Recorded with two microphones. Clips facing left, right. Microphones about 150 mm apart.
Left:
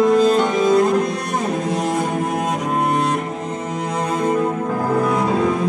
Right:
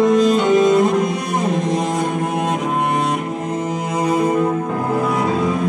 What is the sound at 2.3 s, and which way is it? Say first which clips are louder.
Cello: right 1 dB; centre (ahead or behind).